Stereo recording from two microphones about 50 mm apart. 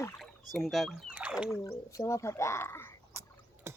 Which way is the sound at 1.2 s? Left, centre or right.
Centre.